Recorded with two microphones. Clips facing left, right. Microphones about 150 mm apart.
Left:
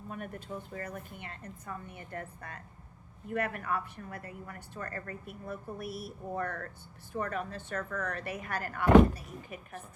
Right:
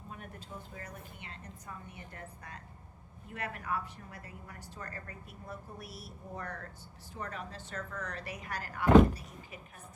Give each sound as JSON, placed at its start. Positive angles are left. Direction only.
{"t": 0.1, "sound": "a woman's voice", "side_deg": 55}